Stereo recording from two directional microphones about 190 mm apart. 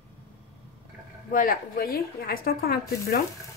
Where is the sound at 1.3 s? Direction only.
45° left (ahead or behind).